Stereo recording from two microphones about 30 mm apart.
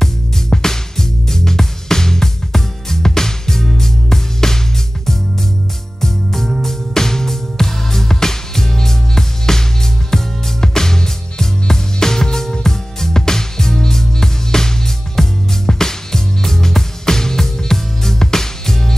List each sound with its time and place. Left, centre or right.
0.5 s music: centre
5.9 s music: centre